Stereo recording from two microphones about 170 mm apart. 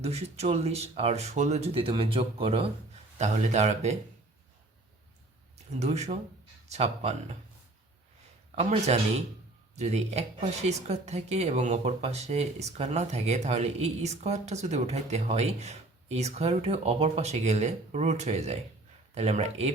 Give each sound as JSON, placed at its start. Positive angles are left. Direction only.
{"t": 0.0, "sound": "speech", "side_deg": -40}
{"t": 5.8, "sound": "speech", "side_deg": -40}
{"t": 8.5, "sound": "speech", "side_deg": -40}